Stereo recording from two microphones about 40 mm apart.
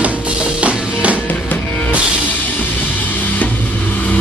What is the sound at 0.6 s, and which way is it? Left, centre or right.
Music, right.